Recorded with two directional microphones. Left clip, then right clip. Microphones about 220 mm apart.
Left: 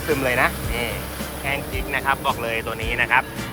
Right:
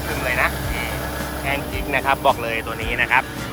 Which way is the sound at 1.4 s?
Centre (ahead or behind).